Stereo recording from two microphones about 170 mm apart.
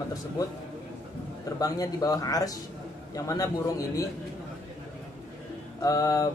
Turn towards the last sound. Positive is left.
turn(degrees=20)  # may be behind; listen again after turning